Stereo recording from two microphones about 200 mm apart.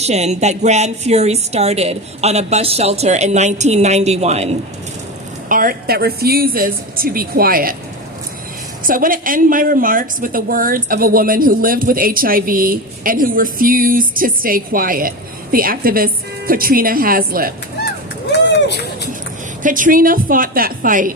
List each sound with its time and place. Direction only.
0.0 s a woman's voice: 35° right (ahead or behind)
5.5 s a woman's voice: 45° right (ahead or behind)
8.8 s a woman's voice: 45° right (ahead or behind)
19.6 s a woman's voice: 40° right (ahead or behind)